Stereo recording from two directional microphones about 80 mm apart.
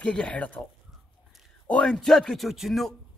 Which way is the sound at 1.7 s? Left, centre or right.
Centre.